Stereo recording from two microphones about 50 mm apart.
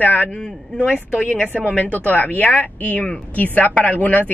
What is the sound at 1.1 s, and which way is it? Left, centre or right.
Speech, right.